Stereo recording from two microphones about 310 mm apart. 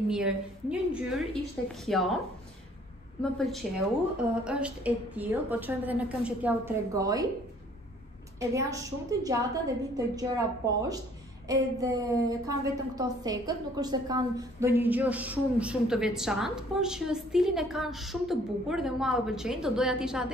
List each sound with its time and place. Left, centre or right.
0.1 s a woman's voice: centre
3.2 s a woman's voice: centre
8.4 s a woman's voice: centre